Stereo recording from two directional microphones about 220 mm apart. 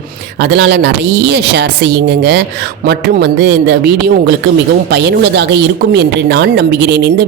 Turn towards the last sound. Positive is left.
turn(degrees=-50)  # may be behind; listen again after turning